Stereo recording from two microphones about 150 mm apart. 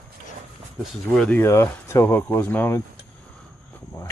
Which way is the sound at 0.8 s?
5° left (ahead or behind).